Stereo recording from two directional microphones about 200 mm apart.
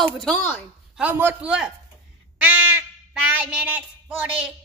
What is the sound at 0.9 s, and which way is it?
Speech, 5° right (ahead or behind).